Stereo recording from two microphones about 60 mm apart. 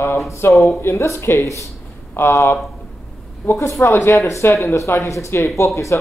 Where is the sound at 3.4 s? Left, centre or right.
Left.